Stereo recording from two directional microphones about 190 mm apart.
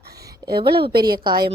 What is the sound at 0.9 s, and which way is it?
Speech, 55° right (ahead or behind).